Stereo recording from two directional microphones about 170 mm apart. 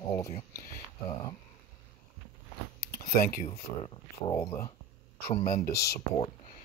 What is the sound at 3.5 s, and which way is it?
Speech, 30° left (ahead or behind).